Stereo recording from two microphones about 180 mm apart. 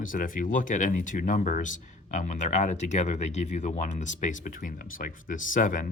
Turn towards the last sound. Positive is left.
turn(degrees=45)  # may be behind; listen again after turning